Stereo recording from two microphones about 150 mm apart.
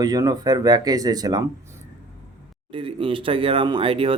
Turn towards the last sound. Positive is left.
turn(degrees=-35)  # may be behind; listen again after turning